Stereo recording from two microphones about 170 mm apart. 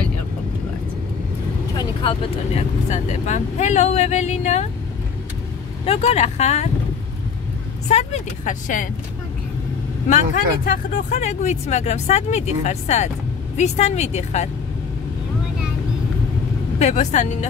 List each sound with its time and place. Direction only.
2.0 s speech: 40° left (ahead or behind)
5.9 s speech: 40° left (ahead or behind)
7.9 s speech: 45° left (ahead or behind)
10.0 s speech: 50° left (ahead or behind)
16.7 s speech: 45° left (ahead or behind)